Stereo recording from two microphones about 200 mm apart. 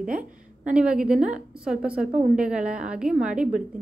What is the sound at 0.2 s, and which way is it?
A woman's voice, 5° right (ahead or behind).